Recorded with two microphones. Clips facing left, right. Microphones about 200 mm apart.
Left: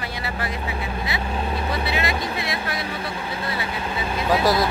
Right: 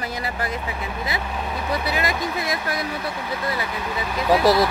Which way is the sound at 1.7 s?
30° left (ahead or behind).